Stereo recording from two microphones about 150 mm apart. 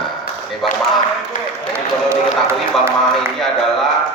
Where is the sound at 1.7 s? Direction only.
15° right (ahead or behind).